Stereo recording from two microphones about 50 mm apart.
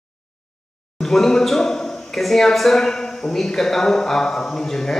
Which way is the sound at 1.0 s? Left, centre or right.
Centre.